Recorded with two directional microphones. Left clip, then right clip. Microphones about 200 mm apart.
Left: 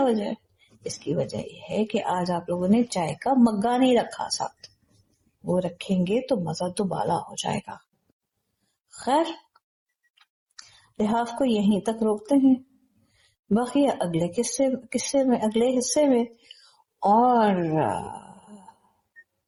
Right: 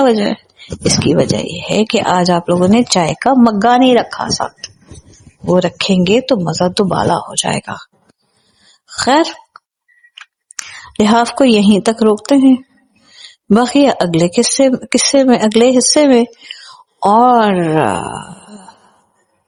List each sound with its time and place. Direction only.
0.0 s speech: 45° right (ahead or behind)
9.0 s speech: 50° right (ahead or behind)
11.0 s speech: 50° right (ahead or behind)